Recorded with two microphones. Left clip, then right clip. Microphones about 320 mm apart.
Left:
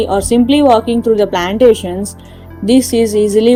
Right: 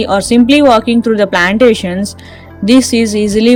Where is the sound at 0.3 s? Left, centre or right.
Right.